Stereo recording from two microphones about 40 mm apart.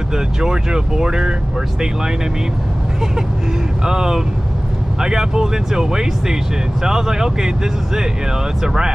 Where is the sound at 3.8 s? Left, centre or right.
Centre.